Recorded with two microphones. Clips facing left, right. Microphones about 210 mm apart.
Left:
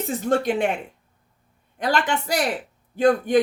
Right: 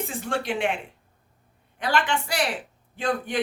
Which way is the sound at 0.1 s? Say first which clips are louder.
Left 7 dB; 40° left (ahead or behind).